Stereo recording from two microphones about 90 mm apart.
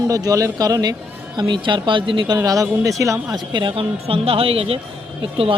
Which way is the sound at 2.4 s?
35° right (ahead or behind).